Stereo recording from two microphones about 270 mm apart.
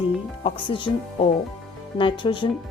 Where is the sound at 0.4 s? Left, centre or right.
Centre.